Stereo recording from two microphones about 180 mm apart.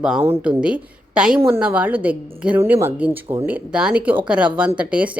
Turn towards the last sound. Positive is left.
turn(degrees=-5)  # may be behind; listen again after turning